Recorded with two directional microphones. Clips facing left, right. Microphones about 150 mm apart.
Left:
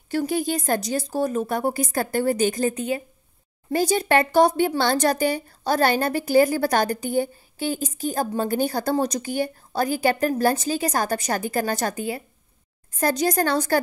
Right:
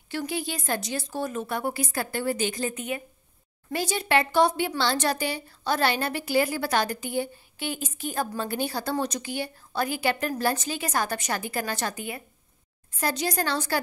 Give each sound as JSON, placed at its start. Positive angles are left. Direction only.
{"t": 0.3, "sound": "a woman's voice", "side_deg": 45}